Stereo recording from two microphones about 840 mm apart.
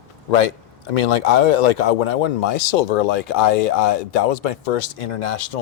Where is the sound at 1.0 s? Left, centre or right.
Left.